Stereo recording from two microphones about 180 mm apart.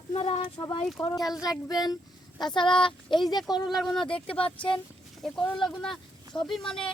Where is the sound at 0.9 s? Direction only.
5° left (ahead or behind).